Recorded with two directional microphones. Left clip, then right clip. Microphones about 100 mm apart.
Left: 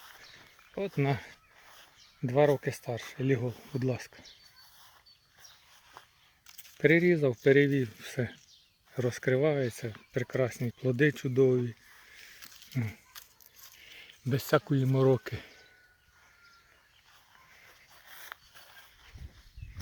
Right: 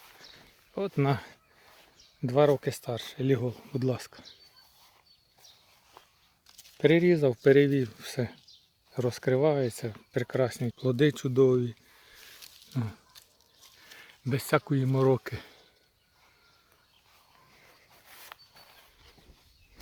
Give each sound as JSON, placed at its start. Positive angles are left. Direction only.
{"t": 0.8, "sound": "speech", "side_deg": -30}
{"t": 2.2, "sound": "speech", "side_deg": -15}
{"t": 6.7, "sound": "speech", "side_deg": -10}
{"t": 7.9, "sound": "speech", "side_deg": 0}
{"t": 9.4, "sound": "speech", "side_deg": -25}
{"t": 14.0, "sound": "speech", "side_deg": 0}
{"t": 18.1, "sound": "a sound", "side_deg": -15}